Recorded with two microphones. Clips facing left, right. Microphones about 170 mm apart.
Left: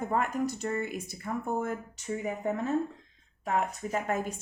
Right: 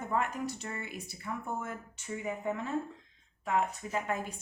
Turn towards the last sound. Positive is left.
turn(degrees=45)  # may be behind; listen again after turning